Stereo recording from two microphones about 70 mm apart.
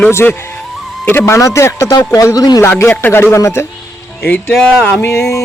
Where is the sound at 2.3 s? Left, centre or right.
Left.